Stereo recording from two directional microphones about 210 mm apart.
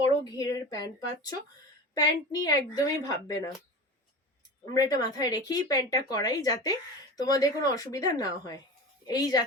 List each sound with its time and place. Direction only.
0.3 s speech: 15° left (ahead or behind)
4.7 s a woman's voice: 20° left (ahead or behind)